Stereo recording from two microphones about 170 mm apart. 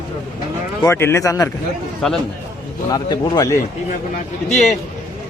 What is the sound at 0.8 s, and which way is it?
Speech, 15° left (ahead or behind).